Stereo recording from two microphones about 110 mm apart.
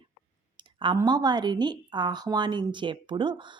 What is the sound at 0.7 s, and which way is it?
A woman's voice, 45° right (ahead or behind).